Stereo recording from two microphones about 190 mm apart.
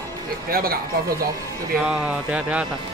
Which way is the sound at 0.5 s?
50° right (ahead or behind).